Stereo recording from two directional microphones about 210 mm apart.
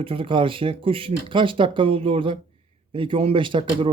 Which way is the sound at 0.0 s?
25° right (ahead or behind).